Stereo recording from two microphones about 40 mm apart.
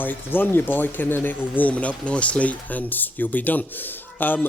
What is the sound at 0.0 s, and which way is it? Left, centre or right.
Speech, left.